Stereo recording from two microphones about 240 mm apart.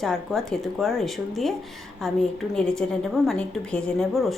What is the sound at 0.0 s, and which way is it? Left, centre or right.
A woman's voice, centre.